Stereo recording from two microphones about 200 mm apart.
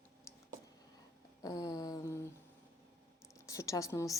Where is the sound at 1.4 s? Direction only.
20° left (ahead or behind).